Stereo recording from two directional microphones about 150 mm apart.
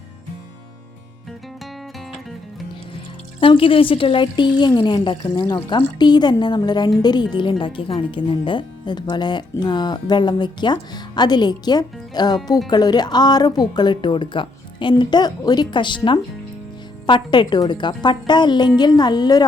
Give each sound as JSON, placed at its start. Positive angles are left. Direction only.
{"t": 3.4, "sound": "a woman's voice", "side_deg": 35}
{"t": 17.1, "sound": "speech", "side_deg": 30}